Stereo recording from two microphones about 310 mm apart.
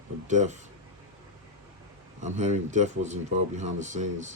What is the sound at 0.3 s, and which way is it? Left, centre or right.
Speech, right.